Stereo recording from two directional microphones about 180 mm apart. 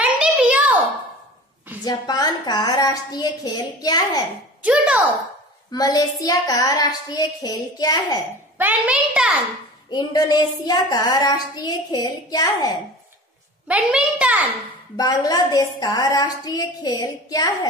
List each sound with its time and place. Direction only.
0.0 s a sound: 5° right (ahead or behind)
1.9 s child singing: 20° left (ahead or behind)
4.6 s a child's voice: 5° right (ahead or behind)
5.7 s child singing: 20° left (ahead or behind)
8.5 s a child's voice: 10° right (ahead or behind)
9.8 s child singing: 20° left (ahead or behind)
13.7 s a child's voice: 5° right (ahead or behind)
15.0 s child singing: 20° left (ahead or behind)